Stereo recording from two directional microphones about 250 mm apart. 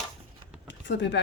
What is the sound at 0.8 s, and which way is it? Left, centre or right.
Speech, left.